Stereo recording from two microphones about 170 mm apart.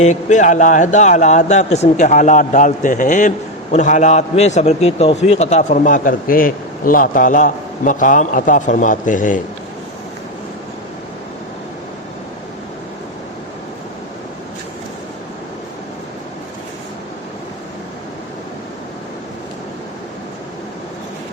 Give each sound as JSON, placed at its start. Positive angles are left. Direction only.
{"t": 0.0, "sound": "speech", "side_deg": 45}